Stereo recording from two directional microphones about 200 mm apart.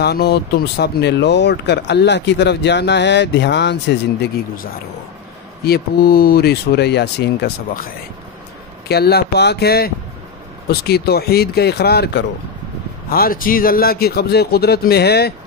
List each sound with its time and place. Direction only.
0.0 s speech: 55° left (ahead or behind)
5.7 s speech: 50° left (ahead or behind)
8.8 s speech: 55° left (ahead or behind)